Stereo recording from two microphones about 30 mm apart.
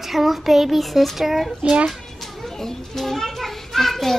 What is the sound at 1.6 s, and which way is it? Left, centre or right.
Speech, right.